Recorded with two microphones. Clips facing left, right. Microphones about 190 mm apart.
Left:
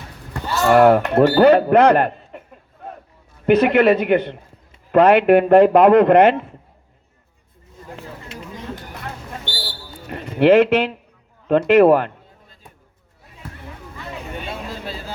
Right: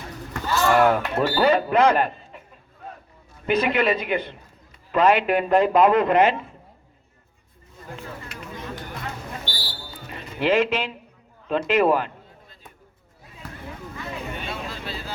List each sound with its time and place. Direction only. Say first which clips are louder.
0.7 s speech: left 7 dB; 55° left (ahead or behind)
3.4 s speech: left 8 dB; 65° left (ahead or behind)
8.0 s a sound: left 2 dB; 25° left (ahead or behind)
10.1 s speech: left 9 dB; 55° left (ahead or behind)